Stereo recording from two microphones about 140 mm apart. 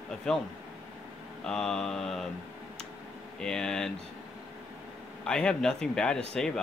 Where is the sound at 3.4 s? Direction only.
5° left (ahead or behind).